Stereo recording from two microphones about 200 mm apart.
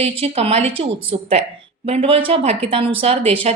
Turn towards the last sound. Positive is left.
turn(degrees=-30)  # may be behind; listen again after turning